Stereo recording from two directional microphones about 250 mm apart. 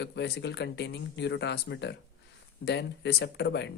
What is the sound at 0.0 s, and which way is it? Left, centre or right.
Speech, left.